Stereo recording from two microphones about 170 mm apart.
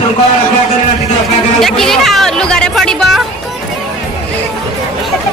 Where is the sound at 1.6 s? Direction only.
5° left (ahead or behind).